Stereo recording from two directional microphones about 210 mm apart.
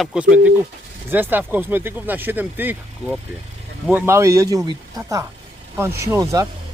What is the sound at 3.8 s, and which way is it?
Speech, 10° right (ahead or behind).